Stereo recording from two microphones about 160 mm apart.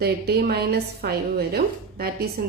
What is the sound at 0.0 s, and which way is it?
A woman's voice, 75° right (ahead or behind).